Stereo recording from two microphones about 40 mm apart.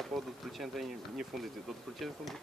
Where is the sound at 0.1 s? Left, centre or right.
Centre.